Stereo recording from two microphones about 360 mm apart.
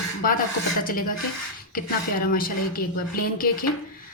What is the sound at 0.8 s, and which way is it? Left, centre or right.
A woman's voice, left.